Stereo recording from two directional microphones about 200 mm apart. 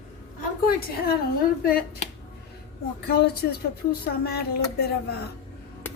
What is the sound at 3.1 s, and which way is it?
A child's voice, 55° left (ahead or behind).